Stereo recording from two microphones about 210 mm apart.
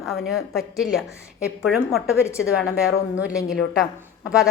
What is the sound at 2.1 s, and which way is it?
Speech, 15° left (ahead or behind).